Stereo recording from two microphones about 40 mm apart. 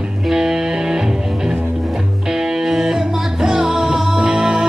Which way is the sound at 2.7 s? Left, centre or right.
Centre.